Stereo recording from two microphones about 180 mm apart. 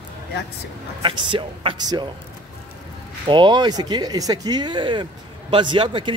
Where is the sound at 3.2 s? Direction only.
25° right (ahead or behind).